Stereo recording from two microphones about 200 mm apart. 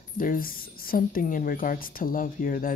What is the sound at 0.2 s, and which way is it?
A woman's voice, 45° left (ahead or behind).